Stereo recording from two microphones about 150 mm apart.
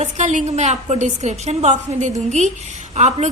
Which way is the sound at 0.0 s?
50° right (ahead or behind).